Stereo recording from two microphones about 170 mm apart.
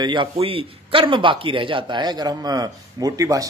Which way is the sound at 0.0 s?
30° right (ahead or behind).